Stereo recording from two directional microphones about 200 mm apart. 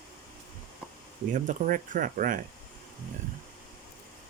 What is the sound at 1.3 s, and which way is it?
Speech, 40° right (ahead or behind).